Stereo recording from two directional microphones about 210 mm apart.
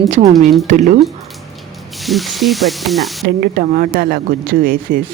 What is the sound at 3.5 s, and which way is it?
Speech, 45° right (ahead or behind).